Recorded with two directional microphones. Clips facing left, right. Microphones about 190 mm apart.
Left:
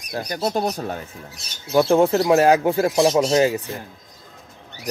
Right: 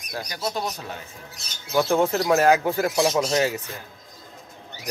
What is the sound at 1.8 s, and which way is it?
Speech, 30° left (ahead or behind).